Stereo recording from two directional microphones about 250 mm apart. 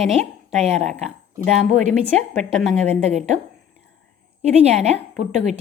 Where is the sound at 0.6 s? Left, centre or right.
Right.